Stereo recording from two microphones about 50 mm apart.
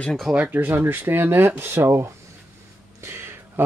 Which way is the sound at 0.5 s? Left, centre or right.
Right.